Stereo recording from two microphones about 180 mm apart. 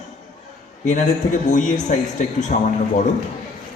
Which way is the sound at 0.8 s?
40° left (ahead or behind).